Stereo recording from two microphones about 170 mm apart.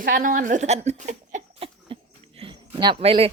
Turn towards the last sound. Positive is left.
turn(degrees=-35)  # may be behind; listen again after turning